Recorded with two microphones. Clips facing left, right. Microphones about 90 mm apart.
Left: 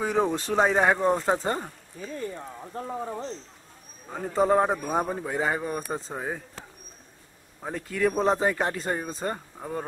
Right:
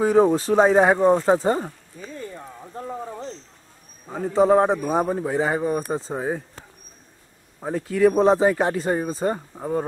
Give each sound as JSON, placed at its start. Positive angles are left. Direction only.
{"t": 0.0, "sound": "speech", "side_deg": -5}
{"t": 5.5, "sound": "speech", "side_deg": -20}
{"t": 5.8, "sound": "speech", "side_deg": -5}
{"t": 6.1, "sound": "speech", "side_deg": -15}
{"t": 7.6, "sound": "speech", "side_deg": -10}